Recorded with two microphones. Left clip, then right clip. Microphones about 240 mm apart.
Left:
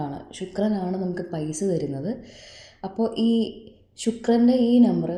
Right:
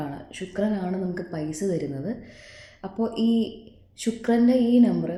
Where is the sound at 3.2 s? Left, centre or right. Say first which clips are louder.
Left 1 dB; centre.